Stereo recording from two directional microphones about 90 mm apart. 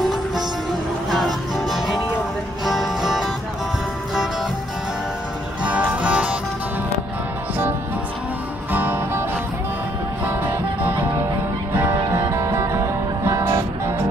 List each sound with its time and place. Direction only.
1.1 s music: centre (ahead or behind)
5.6 s music: 15° right (ahead or behind)
8.7 s music: 20° right (ahead or behind)
10.2 s music: 20° right (ahead or behind)
12.3 s music: 25° right (ahead or behind)